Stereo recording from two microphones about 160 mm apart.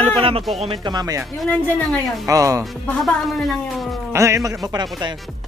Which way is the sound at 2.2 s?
20° right (ahead or behind).